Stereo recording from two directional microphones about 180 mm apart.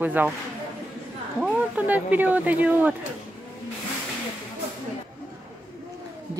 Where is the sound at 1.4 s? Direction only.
5° right (ahead or behind).